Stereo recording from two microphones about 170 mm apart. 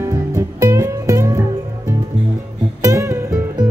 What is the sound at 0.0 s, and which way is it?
Music, 20° right (ahead or behind).